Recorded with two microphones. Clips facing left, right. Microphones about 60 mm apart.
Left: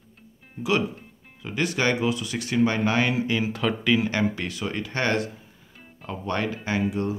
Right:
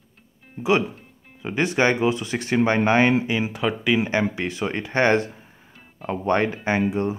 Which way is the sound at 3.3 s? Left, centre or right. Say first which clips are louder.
Right 1 dB; centre.